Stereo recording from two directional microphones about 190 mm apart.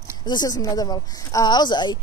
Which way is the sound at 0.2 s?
20° left (ahead or behind).